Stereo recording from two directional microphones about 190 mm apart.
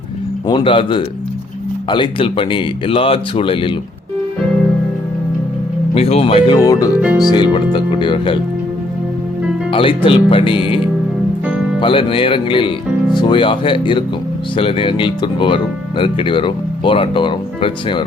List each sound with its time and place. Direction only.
0.4 s speech: 25° left (ahead or behind)
5.9 s speech: 35° left (ahead or behind)
6.6 s speech: 20° left (ahead or behind)
6.9 s speech: 5° right (ahead or behind)
7.3 s speech: 25° left (ahead or behind)
9.7 s speech: 30° left (ahead or behind)
11.4 s music: 5° right (ahead or behind)
11.8 s speech: 25° left (ahead or behind)